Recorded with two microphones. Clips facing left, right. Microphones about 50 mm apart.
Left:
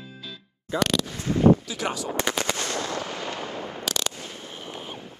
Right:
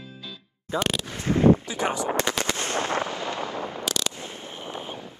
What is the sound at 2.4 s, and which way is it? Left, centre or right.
Artillery fire, right.